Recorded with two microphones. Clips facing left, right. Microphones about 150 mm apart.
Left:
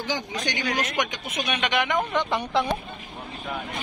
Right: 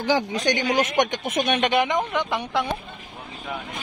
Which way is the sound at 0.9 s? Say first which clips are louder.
Right 6 dB; 45° right (ahead or behind).